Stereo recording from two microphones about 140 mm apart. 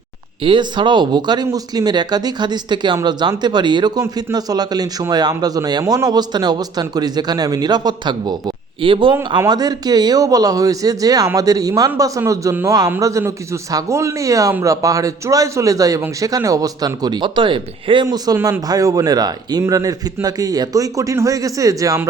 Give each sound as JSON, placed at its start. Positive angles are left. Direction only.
{"t": 0.4, "sound": "speech", "side_deg": -35}
{"t": 18.3, "sound": "speech", "side_deg": -15}